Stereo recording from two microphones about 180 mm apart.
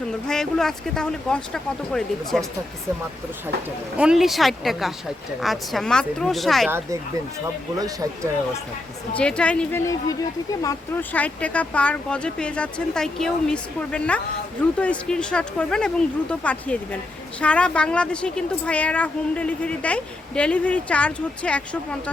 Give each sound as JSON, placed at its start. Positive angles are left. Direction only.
{"t": 0.3, "sound": "speech", "side_deg": 0}
{"t": 3.9, "sound": "speech", "side_deg": -5}
{"t": 6.7, "sound": "speech", "side_deg": -15}
{"t": 9.1, "sound": "a woman's voice", "side_deg": 5}